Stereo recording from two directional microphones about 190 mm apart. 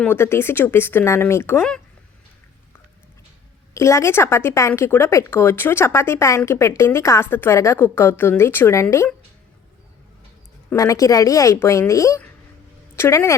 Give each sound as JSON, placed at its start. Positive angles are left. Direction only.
{"t": 0.0, "sound": "speech", "side_deg": 10}
{"t": 3.8, "sound": "speech", "side_deg": 15}
{"t": 10.7, "sound": "speech", "side_deg": 15}